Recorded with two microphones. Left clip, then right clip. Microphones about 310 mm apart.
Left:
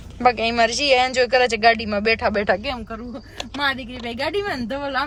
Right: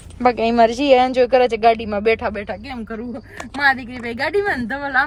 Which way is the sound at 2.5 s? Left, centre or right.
Centre.